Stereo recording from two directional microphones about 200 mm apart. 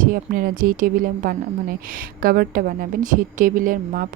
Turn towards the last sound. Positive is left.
turn(degrees=-45)  # may be behind; listen again after turning